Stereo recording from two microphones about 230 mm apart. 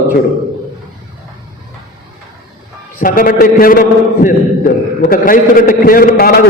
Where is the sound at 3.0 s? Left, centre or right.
Left.